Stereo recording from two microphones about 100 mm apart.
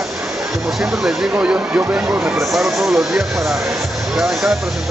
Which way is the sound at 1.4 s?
15° right (ahead or behind).